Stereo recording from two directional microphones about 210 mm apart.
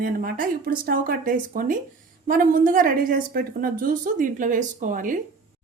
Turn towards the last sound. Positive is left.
turn(degrees=-40)  # may be behind; listen again after turning